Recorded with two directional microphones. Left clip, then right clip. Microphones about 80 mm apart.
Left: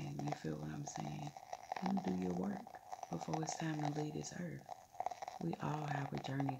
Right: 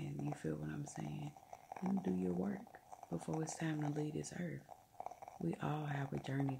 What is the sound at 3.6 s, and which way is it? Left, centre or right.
Speech, right.